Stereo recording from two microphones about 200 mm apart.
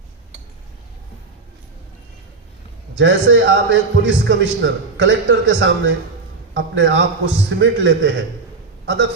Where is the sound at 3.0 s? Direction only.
65° right (ahead or behind).